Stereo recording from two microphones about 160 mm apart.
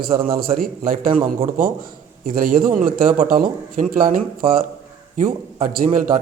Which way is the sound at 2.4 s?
60° right (ahead or behind).